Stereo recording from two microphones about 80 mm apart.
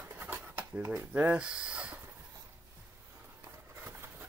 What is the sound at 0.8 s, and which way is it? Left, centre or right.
Speech, right.